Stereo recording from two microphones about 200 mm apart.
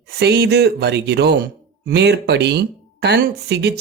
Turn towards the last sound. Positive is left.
turn(degrees=-55)  # may be behind; listen again after turning